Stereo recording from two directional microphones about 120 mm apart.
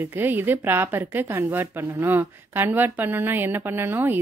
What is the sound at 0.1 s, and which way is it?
A woman's voice, 15° right (ahead or behind).